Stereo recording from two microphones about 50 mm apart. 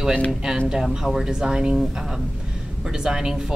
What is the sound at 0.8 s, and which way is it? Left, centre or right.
A woman's voice, centre.